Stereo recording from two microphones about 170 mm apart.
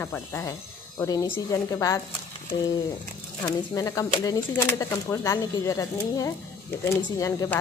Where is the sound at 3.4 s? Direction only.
20° left (ahead or behind).